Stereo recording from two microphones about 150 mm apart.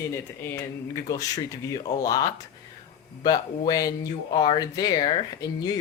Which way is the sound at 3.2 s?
25° left (ahead or behind).